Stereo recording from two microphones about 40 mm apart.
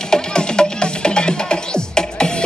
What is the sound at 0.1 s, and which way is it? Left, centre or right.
Music, centre.